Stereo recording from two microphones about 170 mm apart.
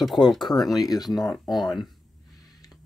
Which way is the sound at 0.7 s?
20° left (ahead or behind).